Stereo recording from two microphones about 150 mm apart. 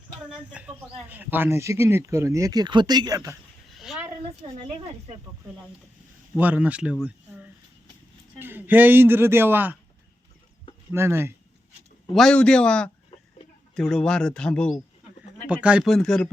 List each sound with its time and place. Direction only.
0.3 s speech: 10° right (ahead or behind)
3.7 s a sound: centre (ahead or behind)
6.3 s a man's voice: 10° right (ahead or behind)
10.9 s a man's voice: 15° right (ahead or behind)
12.1 s speech: 5° left (ahead or behind)
15.4 s speech: 5° right (ahead or behind)